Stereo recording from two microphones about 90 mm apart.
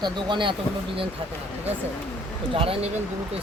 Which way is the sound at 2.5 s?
90° right.